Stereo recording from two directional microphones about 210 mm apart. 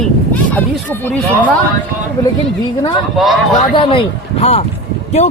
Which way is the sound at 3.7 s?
25° left (ahead or behind).